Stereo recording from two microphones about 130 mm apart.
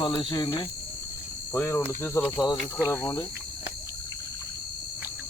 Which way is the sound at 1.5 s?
15° left (ahead or behind).